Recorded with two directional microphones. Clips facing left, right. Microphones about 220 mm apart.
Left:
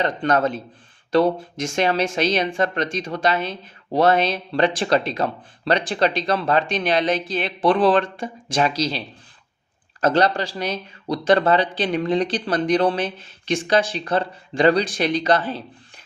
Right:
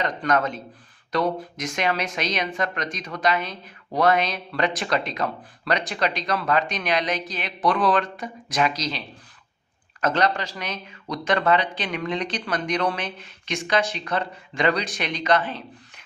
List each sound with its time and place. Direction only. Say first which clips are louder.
0.0 s speech: left 4 dB; 30° left (ahead or behind)